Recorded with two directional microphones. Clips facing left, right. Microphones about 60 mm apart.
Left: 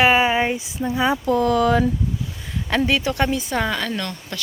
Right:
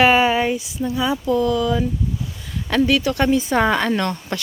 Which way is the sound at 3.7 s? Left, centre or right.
Right.